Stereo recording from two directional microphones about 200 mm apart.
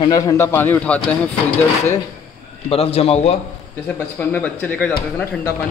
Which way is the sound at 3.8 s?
10° left (ahead or behind).